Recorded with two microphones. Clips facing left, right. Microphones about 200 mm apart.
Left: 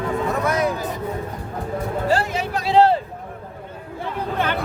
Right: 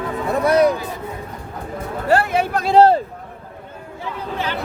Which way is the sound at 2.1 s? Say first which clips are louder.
Right 6 dB; 60° right (ahead or behind).